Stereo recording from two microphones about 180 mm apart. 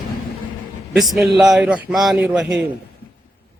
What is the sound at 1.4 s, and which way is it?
A man's voice, 5° right (ahead or behind).